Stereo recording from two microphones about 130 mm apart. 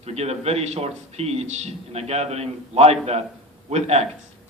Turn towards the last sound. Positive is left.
turn(degrees=-55)  # may be behind; listen again after turning